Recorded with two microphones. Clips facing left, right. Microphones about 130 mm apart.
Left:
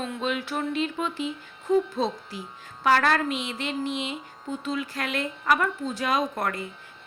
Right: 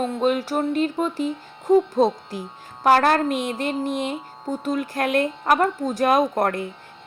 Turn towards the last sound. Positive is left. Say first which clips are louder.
# right 7 dB
turn(degrees=-50)  # may be behind; listen again after turning